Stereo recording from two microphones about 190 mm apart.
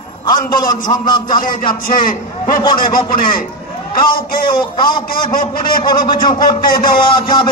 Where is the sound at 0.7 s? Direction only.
20° left (ahead or behind).